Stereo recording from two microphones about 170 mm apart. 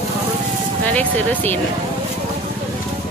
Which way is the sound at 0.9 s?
10° left (ahead or behind).